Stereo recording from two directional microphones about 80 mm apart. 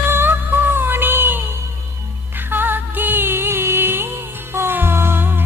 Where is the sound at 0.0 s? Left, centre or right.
Right.